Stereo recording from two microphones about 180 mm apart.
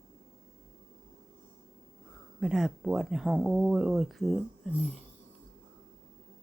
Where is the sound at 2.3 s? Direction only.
5° right (ahead or behind).